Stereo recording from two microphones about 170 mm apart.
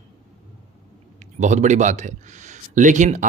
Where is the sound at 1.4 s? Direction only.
45° right (ahead or behind).